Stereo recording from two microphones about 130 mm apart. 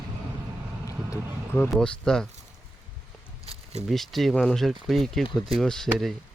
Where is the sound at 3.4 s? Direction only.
50° right (ahead or behind).